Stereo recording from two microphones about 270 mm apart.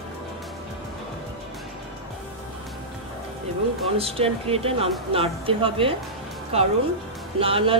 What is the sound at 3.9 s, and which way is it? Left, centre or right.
Speech, right.